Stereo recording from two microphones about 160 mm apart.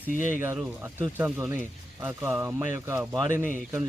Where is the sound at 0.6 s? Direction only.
10° right (ahead or behind).